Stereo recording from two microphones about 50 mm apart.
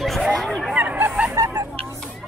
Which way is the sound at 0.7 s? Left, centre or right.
Right.